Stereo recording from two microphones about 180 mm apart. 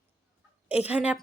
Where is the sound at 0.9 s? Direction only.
5° right (ahead or behind).